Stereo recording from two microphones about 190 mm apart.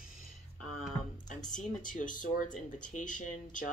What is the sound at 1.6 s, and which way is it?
Speech, 45° left (ahead or behind).